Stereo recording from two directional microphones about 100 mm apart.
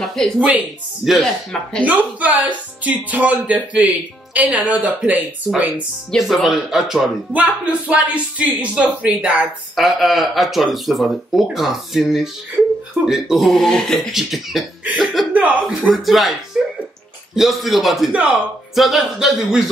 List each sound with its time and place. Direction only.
0.0 s speech: 5° left (ahead or behind)
1.9 s speech: 15° right (ahead or behind)
6.1 s speech: centre (ahead or behind)
7.3 s speech: 15° right (ahead or behind)
9.8 s speech: centre (ahead or behind)
15.3 s speech: 15° right (ahead or behind)
15.9 s speech: centre (ahead or behind)
17.4 s speech: centre (ahead or behind)
18.1 s speech: 15° right (ahead or behind)
18.8 s speech: centre (ahead or behind)